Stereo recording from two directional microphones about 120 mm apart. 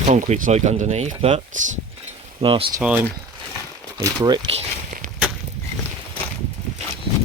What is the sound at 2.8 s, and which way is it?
Speech, 15° right (ahead or behind).